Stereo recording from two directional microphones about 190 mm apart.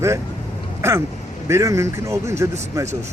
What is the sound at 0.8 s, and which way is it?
Speech, 15° right (ahead or behind).